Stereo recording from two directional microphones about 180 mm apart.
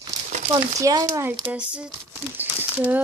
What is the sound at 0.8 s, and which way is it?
Speech, 20° right (ahead or behind).